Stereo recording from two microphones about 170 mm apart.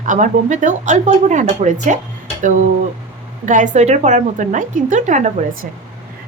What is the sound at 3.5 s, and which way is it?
Speech, 45° right (ahead or behind).